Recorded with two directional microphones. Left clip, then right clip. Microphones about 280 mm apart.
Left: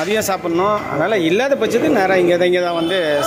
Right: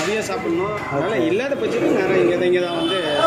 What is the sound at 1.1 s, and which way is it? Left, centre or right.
Speech, left.